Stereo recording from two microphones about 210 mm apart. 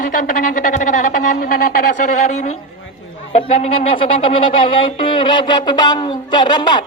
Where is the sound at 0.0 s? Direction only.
40° left (ahead or behind).